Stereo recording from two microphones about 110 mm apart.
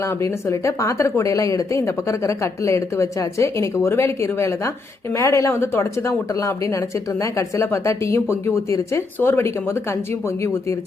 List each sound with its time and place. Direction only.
0.0 s speech: 25° left (ahead or behind)